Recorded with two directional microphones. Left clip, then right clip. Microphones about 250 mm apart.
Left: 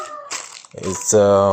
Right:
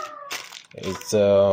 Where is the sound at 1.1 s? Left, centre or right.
Centre.